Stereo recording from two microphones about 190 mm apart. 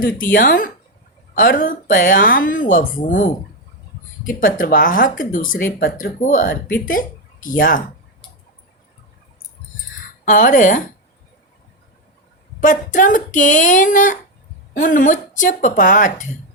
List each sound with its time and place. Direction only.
0.0 s speech: 45° left (ahead or behind)
10.2 s speech: 40° left (ahead or behind)
12.5 s speech: 40° left (ahead or behind)